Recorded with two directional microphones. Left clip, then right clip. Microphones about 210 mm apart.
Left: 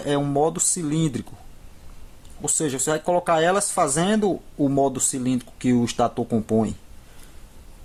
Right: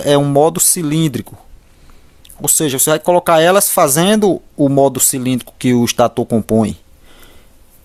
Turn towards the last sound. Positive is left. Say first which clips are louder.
# right 8 dB
turn(degrees=-40)  # may be behind; listen again after turning